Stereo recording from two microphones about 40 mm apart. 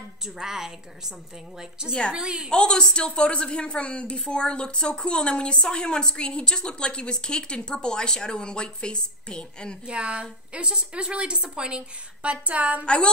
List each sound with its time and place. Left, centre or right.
0.4 s a woman's voice: centre
2.5 s a woman's voice: left
9.8 s a woman's voice: right
12.8 s a woman's voice: left